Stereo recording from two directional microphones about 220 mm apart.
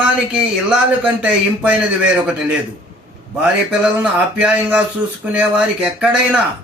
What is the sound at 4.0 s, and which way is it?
Speech, 5° right (ahead or behind).